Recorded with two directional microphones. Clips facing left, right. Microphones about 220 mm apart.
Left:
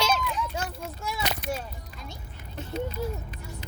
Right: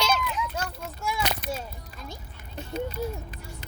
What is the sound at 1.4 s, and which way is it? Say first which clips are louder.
Speech: left 1 dB; 45° right (ahead or behind).